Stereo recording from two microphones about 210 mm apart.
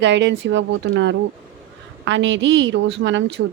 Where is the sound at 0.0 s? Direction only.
60° right (ahead or behind).